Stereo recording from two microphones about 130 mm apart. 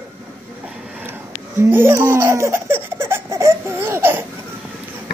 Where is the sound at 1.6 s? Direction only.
15° right (ahead or behind).